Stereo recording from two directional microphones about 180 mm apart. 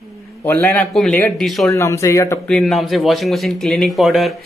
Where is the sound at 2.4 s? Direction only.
5° left (ahead or behind).